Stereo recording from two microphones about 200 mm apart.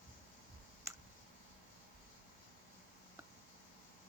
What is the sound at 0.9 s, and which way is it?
Clicking, 15° right (ahead or behind).